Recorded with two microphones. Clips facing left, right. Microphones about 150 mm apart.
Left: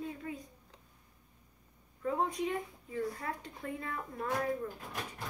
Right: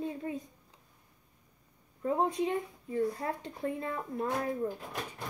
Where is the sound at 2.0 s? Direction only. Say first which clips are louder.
Right 4 dB; 25° right (ahead or behind).